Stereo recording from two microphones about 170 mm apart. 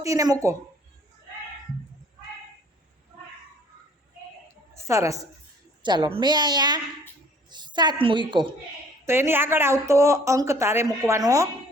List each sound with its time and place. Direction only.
0.0 s a woman's voice: 20° right (ahead or behind)
4.7 s a woman's voice: 15° right (ahead or behind)
9.0 s speech: 15° right (ahead or behind)